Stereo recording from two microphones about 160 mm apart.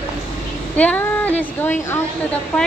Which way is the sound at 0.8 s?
10° left (ahead or behind).